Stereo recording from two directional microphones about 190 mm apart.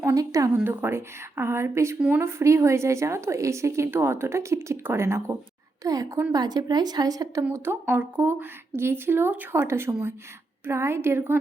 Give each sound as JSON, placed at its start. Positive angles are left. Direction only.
{"t": 0.0, "sound": "a woman's voice", "side_deg": -15}